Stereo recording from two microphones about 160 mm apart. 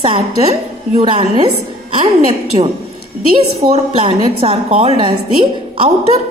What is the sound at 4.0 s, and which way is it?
A woman's voice, 35° right (ahead or behind).